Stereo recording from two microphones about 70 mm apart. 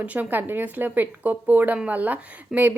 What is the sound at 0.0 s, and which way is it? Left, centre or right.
A woman's voice, right.